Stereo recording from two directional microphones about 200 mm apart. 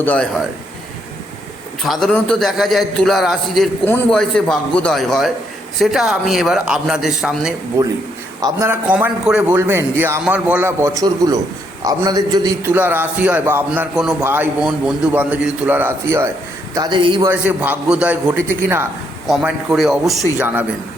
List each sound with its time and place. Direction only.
0.0 s a man's voice: 5° left (ahead or behind)
1.8 s a man's voice: centre (ahead or behind)
8.4 s a man's voice: 15° right (ahead or behind)
17.2 s a man's voice: 10° right (ahead or behind)